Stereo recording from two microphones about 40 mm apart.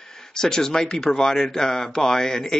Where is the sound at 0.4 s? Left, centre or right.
Centre.